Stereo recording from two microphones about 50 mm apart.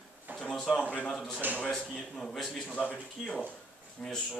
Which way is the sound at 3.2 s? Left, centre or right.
Centre.